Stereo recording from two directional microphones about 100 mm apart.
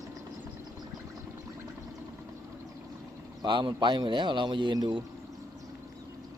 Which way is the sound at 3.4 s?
50° right (ahead or behind).